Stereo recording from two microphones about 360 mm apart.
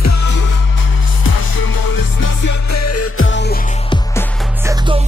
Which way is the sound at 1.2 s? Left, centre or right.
Left.